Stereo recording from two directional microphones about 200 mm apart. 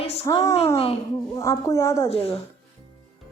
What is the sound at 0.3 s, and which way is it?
Speech, 15° left (ahead or behind).